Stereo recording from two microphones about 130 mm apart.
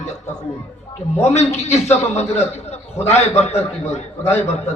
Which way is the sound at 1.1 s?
55° left (ahead or behind).